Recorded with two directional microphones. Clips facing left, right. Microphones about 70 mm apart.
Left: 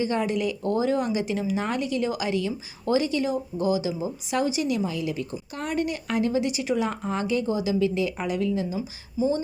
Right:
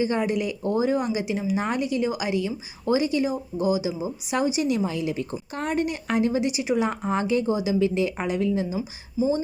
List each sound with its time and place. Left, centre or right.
0.0 s speech: centre
9.1 s speech: centre